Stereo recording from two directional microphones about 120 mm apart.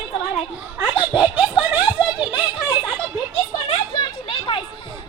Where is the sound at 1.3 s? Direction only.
10° right (ahead or behind).